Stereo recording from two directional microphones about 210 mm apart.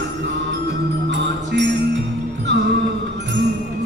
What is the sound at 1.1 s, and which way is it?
Music, 60° right (ahead or behind).